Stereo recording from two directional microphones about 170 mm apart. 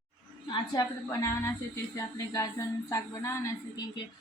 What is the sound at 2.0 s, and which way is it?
A woman's voice, 20° left (ahead or behind).